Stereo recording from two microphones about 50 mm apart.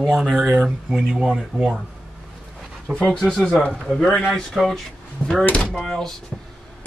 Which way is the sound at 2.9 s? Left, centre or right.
Left.